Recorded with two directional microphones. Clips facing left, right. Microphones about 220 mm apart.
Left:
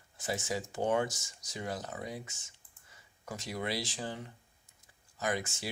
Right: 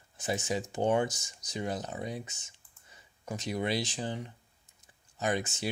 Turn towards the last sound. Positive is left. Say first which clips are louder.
# right 4 dB
turn(degrees=-20)  # may be behind; listen again after turning